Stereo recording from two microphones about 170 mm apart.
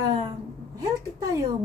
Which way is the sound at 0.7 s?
20° right (ahead or behind).